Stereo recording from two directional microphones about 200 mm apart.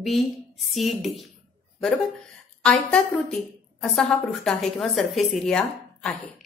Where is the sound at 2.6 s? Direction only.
5° left (ahead or behind).